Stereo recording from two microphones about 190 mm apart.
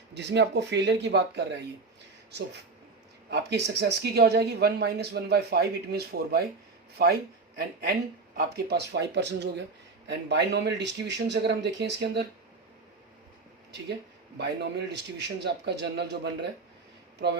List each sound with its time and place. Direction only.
0.1 s speech: 65° right (ahead or behind)
3.2 s speech: 60° right (ahead or behind)
14.3 s speech: 60° right (ahead or behind)